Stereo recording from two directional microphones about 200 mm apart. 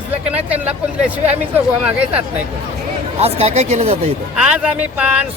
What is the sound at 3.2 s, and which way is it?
Speech, 30° right (ahead or behind).